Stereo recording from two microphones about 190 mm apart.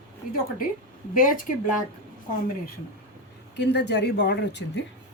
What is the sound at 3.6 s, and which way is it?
A woman's voice, 60° left (ahead or behind).